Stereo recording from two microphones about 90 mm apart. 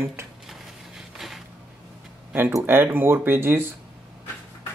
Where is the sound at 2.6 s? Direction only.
25° right (ahead or behind).